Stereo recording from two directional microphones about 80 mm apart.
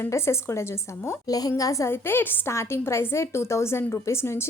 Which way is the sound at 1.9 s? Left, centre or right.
Left.